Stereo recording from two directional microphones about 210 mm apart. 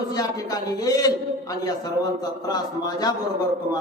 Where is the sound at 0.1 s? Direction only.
15° left (ahead or behind).